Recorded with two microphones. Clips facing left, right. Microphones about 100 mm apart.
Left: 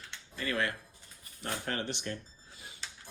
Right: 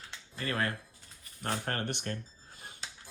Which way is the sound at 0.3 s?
35° right (ahead or behind).